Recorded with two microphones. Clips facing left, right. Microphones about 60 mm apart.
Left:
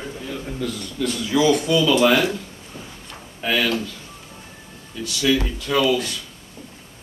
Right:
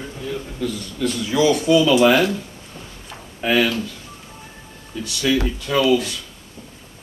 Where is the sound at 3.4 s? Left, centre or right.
Centre.